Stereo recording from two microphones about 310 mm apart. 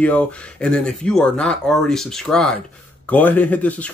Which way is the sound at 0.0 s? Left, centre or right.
Centre.